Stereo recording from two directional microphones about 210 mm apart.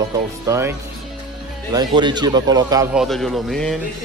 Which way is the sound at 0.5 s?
10° right (ahead or behind).